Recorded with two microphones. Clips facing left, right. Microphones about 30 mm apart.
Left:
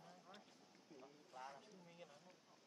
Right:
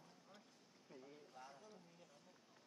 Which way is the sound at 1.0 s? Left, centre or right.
Left.